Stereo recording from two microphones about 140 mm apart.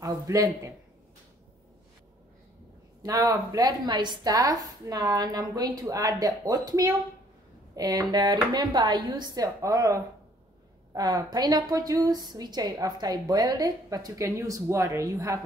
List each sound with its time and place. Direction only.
0.0 s a woman's voice: 25° right (ahead or behind)
3.0 s a woman's voice: 25° right (ahead or behind)
11.0 s a woman's voice: 30° right (ahead or behind)